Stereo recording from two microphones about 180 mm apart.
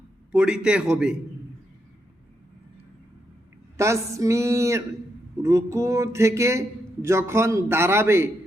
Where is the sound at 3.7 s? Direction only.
15° right (ahead or behind).